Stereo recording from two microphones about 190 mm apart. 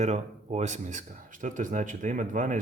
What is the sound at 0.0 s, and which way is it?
Speech, 35° right (ahead or behind).